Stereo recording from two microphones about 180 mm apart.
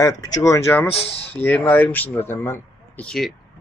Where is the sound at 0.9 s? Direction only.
35° left (ahead or behind).